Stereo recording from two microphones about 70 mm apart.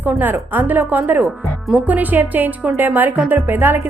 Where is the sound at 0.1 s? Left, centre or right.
Right.